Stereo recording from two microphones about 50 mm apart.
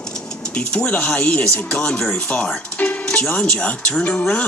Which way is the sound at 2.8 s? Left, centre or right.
Left.